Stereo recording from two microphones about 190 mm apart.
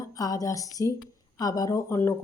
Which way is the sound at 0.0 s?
20° left (ahead or behind).